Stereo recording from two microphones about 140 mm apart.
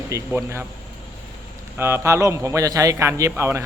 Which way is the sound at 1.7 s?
20° right (ahead or behind).